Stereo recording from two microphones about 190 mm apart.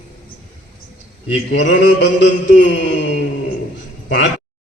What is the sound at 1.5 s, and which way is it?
A man's voice, 70° left (ahead or behind).